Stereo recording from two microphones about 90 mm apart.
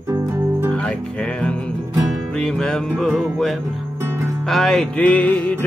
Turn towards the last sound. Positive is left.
turn(degrees=15)  # may be behind; listen again after turning